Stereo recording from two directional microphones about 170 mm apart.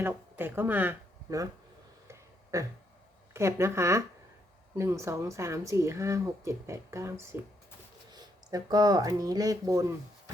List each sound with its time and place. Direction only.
0.0 s speech: 15° right (ahead or behind)
2.0 s a sound: 20° right (ahead or behind)
3.3 s a woman's voice: 15° right (ahead or behind)